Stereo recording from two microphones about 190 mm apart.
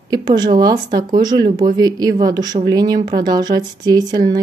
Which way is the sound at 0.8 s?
50° right (ahead or behind).